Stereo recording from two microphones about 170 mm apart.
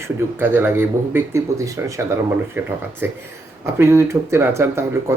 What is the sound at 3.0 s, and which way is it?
Speech, 15° right (ahead or behind).